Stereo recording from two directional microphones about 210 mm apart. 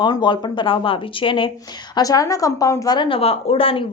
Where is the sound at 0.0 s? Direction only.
20° left (ahead or behind).